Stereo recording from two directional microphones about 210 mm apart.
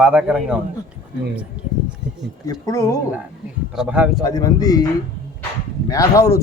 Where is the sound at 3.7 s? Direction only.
5° right (ahead or behind).